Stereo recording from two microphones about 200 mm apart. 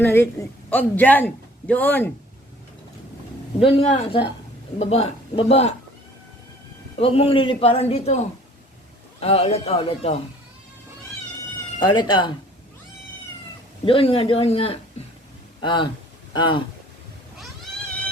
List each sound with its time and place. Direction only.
0.0 s a man's voice: 10° left (ahead or behind)
3.6 s a man's voice: 30° left (ahead or behind)
6.9 s a man's voice: 30° left (ahead or behind)
9.2 s a man's voice: 30° left (ahead or behind)
11.8 s a man's voice: 25° left (ahead or behind)
13.8 s a man's voice: 25° left (ahead or behind)